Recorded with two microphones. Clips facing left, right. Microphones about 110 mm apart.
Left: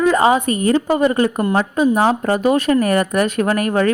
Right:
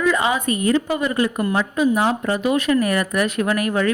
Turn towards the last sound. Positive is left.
turn(degrees=40)  # may be behind; listen again after turning